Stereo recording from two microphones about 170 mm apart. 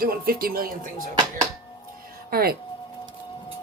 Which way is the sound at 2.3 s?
60° right (ahead or behind).